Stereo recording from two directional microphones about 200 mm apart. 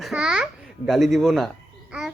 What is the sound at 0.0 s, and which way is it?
A child's voice, 5° right (ahead or behind).